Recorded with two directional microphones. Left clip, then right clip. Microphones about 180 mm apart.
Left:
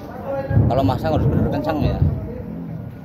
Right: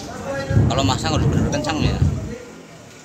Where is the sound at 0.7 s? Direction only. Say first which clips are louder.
Left 2 dB; 40° left (ahead or behind).